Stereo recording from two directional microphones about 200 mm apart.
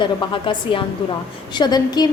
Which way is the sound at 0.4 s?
25° left (ahead or behind).